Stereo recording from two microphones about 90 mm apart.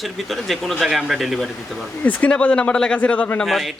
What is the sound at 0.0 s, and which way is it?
Speech, centre (ahead or behind).